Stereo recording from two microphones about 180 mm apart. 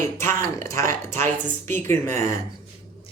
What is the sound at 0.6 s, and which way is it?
Speech, 15° left (ahead or behind).